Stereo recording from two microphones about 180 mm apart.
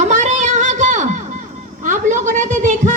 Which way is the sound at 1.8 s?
45° right (ahead or behind).